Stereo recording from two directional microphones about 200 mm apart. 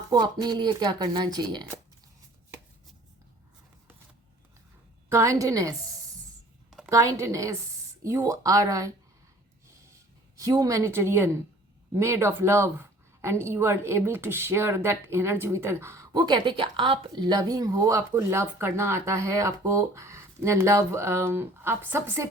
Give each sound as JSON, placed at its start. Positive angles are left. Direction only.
{"t": 0.1, "sound": "speech", "side_deg": -20}
{"t": 5.0, "sound": "speech", "side_deg": -15}
{"t": 6.7, "sound": "a sound", "side_deg": 0}
{"t": 6.9, "sound": "speech", "side_deg": -15}
{"t": 10.4, "sound": "a woman's voice", "side_deg": -15}